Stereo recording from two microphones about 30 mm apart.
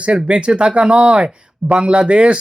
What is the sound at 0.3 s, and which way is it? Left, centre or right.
Speech, right.